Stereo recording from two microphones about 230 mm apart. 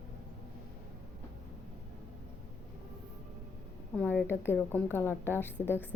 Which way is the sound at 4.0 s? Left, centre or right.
Centre.